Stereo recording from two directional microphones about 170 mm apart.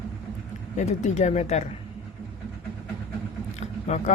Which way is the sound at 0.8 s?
45° left (ahead or behind).